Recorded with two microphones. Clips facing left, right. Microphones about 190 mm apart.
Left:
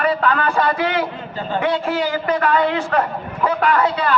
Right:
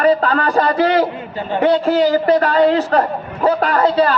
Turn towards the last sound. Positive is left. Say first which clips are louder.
# right 3 dB
turn(degrees=-35)  # may be behind; listen again after turning